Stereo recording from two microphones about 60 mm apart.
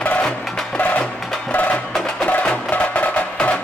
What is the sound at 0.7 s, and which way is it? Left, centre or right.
Music, left.